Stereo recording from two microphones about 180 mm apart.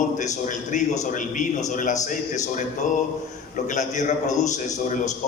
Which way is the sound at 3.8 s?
40° left (ahead or behind).